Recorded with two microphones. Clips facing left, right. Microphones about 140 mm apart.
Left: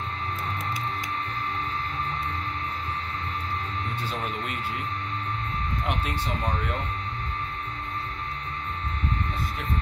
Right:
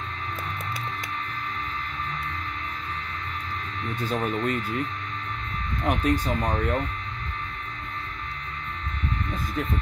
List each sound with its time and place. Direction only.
4.0 s speech: 45° right (ahead or behind)
5.9 s speech: 45° right (ahead or behind)